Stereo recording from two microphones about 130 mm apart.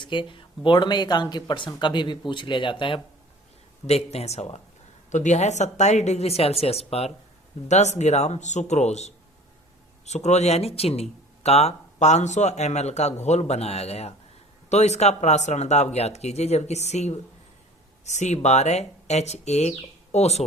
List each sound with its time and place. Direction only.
0.0 s speech: 40° left (ahead or behind)
3.8 s speech: 55° left (ahead or behind)
7.7 s speech: 60° left (ahead or behind)